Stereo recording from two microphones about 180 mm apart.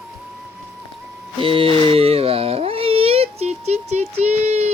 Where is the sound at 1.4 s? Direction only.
30° right (ahead or behind).